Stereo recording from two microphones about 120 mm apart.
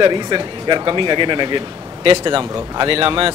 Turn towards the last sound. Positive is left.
turn(degrees=-50)  # may be behind; listen again after turning